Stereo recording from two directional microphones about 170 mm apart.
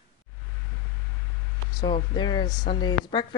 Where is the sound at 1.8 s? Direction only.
25° left (ahead or behind).